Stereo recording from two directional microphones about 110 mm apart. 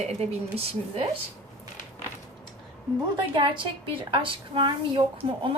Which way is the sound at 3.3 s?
50° right (ahead or behind).